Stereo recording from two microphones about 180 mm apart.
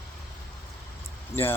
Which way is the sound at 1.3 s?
10° left (ahead or behind).